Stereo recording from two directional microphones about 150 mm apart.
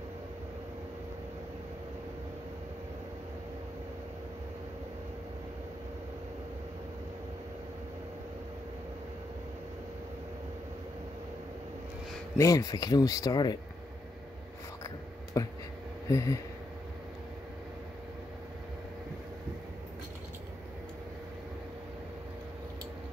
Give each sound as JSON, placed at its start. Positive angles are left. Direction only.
{"t": 12.4, "sound": "speech", "side_deg": 25}
{"t": 15.3, "sound": "a sound", "side_deg": 25}
{"t": 16.1, "sound": "speech", "side_deg": 20}